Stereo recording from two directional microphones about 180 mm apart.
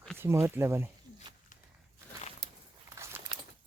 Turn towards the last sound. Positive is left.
turn(degrees=-15)  # may be behind; listen again after turning